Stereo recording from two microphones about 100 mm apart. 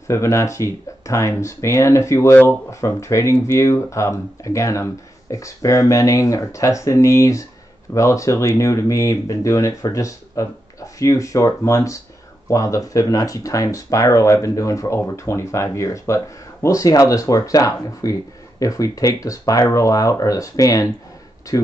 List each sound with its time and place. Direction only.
0.1 s speech: 30° left (ahead or behind)